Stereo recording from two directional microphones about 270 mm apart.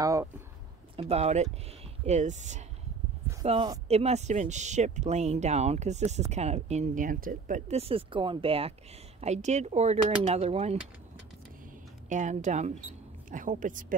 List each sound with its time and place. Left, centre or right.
0.0 s speech: centre
0.9 s speech: right
12.1 s speech: right